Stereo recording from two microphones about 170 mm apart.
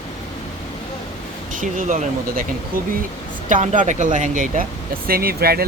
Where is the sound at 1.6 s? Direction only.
45° right (ahead or behind).